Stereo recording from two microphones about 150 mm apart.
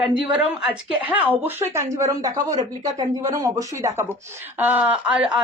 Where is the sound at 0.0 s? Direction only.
5° right (ahead or behind).